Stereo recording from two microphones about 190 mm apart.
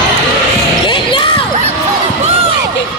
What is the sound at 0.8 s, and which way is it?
Basketball bounce, 25° left (ahead or behind).